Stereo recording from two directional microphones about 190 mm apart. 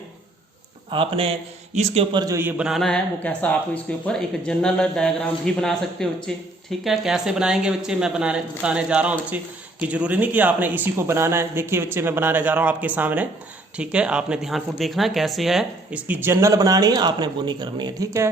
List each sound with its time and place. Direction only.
0.9 s speech: 30° right (ahead or behind)
2.2 s a man's voice: 15° right (ahead or behind)